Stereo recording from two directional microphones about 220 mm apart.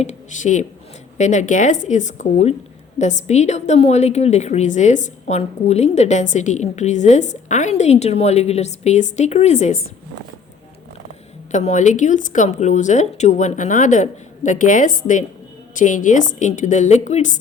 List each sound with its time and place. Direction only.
0.0 s a woman's voice: 35° left (ahead or behind)
11.5 s a woman's voice: 30° left (ahead or behind)